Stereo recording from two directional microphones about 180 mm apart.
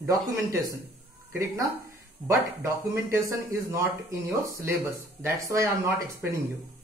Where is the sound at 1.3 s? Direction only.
15° right (ahead or behind).